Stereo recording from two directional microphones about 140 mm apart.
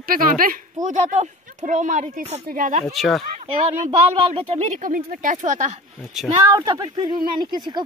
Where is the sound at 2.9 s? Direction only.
Centre (ahead or behind).